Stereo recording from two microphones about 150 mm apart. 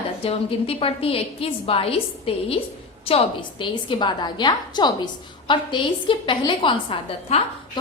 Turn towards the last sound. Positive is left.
turn(degrees=35)  # may be behind; listen again after turning